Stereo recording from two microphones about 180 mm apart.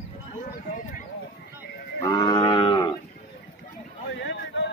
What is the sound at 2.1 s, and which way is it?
Moo, 20° left (ahead or behind).